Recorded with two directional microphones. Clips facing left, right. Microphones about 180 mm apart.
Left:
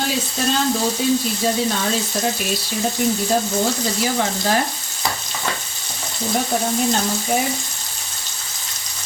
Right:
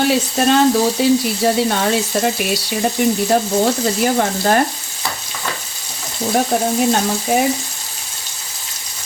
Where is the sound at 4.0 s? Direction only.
55° right (ahead or behind).